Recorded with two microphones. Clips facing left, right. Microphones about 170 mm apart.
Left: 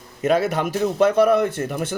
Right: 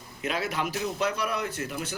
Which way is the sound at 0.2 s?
50° left (ahead or behind).